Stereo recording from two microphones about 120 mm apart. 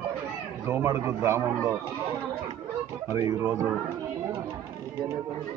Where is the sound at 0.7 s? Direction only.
20° right (ahead or behind).